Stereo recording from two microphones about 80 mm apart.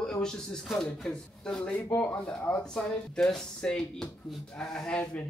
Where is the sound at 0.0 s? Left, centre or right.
Centre.